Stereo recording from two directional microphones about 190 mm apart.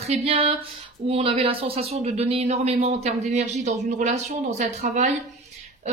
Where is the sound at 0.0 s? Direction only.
30° right (ahead or behind).